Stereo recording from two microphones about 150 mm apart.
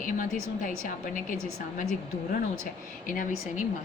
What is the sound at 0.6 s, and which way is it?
Speech, 65° left (ahead or behind).